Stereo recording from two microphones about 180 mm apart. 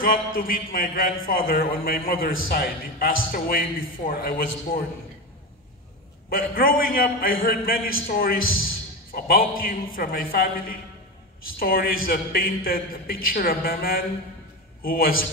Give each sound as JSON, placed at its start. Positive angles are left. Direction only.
{"t": 0.4, "sound": "a man's voice", "side_deg": 55}
{"t": 6.3, "sound": "a woman's voice", "side_deg": 55}